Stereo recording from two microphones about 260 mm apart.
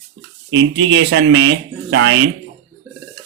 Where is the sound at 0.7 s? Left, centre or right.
Right.